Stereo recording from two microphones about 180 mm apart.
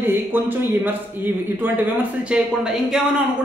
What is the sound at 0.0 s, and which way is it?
Speech, 10° right (ahead or behind).